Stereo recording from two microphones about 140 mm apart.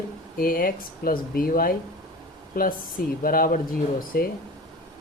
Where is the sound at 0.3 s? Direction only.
90° left.